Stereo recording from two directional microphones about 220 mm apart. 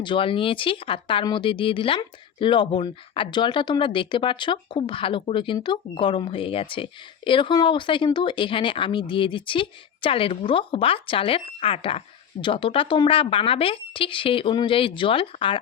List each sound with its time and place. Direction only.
0.0 s speech: 25° left (ahead or behind)